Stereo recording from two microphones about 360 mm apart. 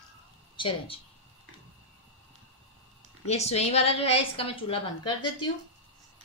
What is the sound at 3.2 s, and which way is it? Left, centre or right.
A woman's voice, centre.